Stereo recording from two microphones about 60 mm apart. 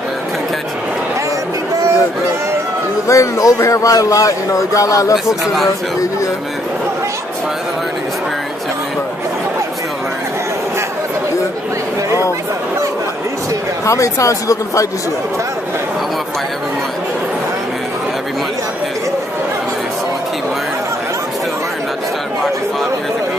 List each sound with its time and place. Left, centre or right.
3.1 s speech: left
5.1 s a man's voice: centre
13.8 s speech: left